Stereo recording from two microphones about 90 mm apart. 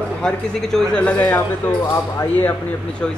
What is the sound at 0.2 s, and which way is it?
Speech, 5° left (ahead or behind).